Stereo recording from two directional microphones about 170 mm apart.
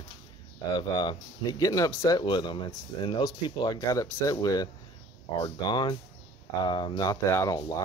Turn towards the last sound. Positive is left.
turn(degrees=20)  # may be behind; listen again after turning